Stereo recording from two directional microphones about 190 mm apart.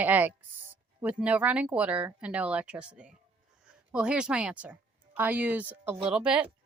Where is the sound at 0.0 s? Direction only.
10° right (ahead or behind).